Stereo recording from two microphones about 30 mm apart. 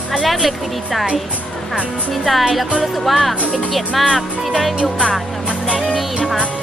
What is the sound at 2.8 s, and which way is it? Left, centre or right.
A woman's voice, centre.